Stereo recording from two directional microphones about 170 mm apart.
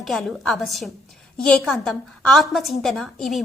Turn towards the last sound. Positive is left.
turn(degrees=0)  # may be behind; listen again after turning